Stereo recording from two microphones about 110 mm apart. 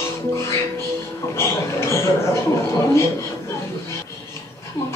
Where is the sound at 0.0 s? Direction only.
25° left (ahead or behind).